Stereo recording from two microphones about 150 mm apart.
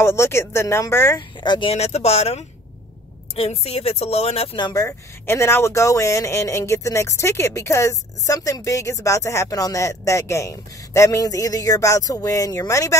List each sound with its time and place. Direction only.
0.0 s speech: 15° left (ahead or behind)
1.4 s speech: 30° left (ahead or behind)